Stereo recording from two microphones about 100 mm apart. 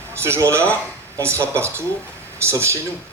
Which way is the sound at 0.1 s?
25° right (ahead or behind).